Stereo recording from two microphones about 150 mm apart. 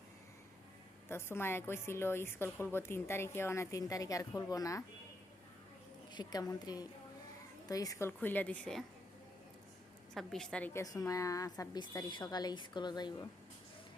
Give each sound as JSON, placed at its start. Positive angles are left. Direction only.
{"t": 1.0, "sound": "a woman's voice", "side_deg": 15}
{"t": 6.1, "sound": "a woman's voice", "side_deg": 25}
{"t": 10.2, "sound": "a woman's voice", "side_deg": 5}
{"t": 10.8, "sound": "a woman's voice", "side_deg": 25}